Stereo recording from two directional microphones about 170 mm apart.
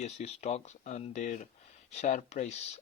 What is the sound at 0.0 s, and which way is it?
Speech, 40° left (ahead or behind).